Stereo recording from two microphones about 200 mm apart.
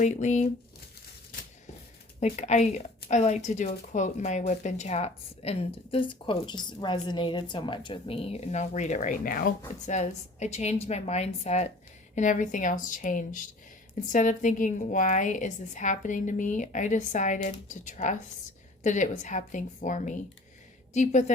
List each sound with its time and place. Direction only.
0.0 s speech: 35° left (ahead or behind)
2.2 s speech: 35° left (ahead or behind)